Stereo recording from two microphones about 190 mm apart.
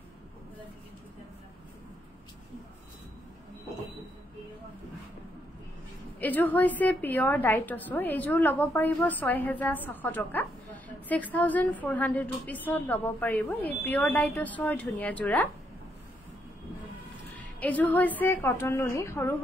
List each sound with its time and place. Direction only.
6.1 s a woman's voice: 10° left (ahead or behind)
17.6 s a woman's voice: 10° left (ahead or behind)